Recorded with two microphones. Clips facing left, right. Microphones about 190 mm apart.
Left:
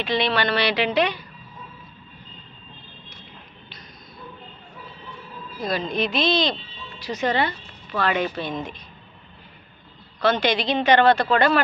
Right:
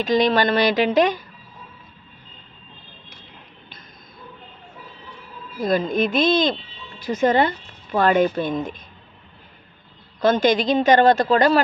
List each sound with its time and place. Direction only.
0.0 s speech: 40° right (ahead or behind)
5.6 s speech: 50° right (ahead or behind)
10.2 s speech: 45° right (ahead or behind)